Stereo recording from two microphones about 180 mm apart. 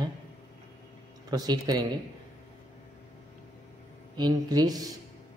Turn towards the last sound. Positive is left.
turn(degrees=-20)  # may be behind; listen again after turning